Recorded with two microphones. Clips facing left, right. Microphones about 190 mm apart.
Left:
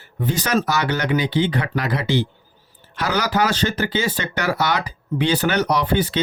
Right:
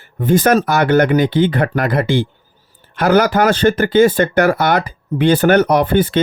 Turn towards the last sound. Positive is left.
turn(degrees=-50)  # may be behind; listen again after turning